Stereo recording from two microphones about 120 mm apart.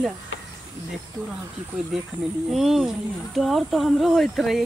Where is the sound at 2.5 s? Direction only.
Centre (ahead or behind).